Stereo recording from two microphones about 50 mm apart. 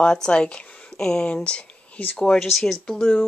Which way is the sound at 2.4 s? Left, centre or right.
Centre.